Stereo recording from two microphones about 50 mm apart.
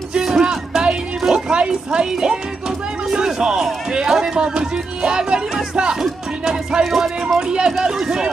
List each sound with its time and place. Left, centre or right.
0.1 s music: centre
1.6 s speech: centre
3.1 s a sound: centre
3.9 s speech: centre